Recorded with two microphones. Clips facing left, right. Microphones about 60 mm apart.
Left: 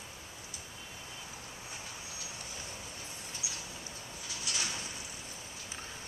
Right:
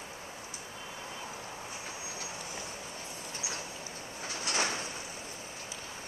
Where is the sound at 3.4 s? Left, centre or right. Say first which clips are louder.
Right 6 dB; right.